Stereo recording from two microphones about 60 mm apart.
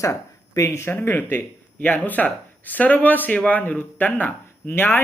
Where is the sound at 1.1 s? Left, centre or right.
Left.